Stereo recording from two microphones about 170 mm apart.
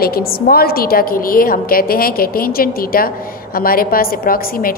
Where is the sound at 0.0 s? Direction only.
60° left (ahead or behind).